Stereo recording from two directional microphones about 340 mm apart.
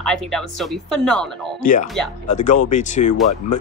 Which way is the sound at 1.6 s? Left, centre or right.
Left.